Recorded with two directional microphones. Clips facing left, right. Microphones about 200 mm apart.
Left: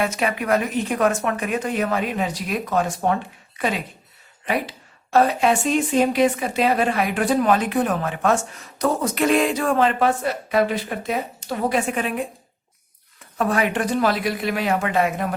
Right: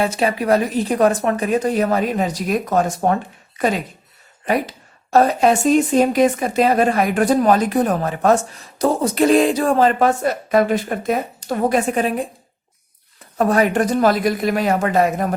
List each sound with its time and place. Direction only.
0.0 s a woman's voice: 30° right (ahead or behind)
13.4 s a woman's voice: 40° right (ahead or behind)